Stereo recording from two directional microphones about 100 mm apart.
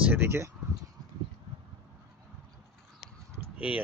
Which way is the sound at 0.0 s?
15° right (ahead or behind).